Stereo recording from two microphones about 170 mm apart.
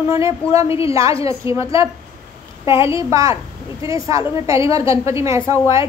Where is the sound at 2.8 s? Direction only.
20° right (ahead or behind).